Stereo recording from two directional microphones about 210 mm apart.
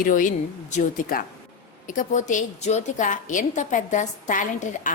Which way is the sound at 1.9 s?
35° left (ahead or behind).